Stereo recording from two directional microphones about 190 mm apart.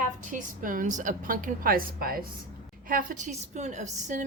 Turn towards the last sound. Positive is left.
turn(degrees=-40)  # may be behind; listen again after turning